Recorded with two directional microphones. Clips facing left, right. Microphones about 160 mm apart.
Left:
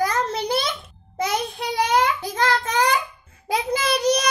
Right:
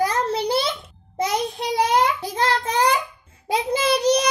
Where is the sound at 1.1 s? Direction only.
35° right (ahead or behind).